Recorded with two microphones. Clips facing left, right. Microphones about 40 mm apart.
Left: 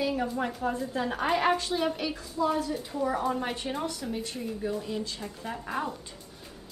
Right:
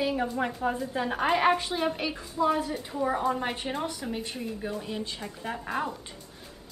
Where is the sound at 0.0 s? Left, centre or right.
Centre.